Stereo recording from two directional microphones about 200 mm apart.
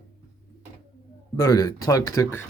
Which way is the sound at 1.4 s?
20° left (ahead or behind).